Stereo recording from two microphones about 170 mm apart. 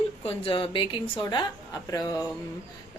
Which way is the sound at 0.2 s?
35° left (ahead or behind).